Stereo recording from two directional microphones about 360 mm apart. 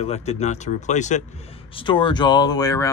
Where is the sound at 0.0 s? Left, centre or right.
Centre.